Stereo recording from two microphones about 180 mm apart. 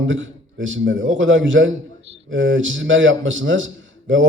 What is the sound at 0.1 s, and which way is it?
A man's voice, 90° right.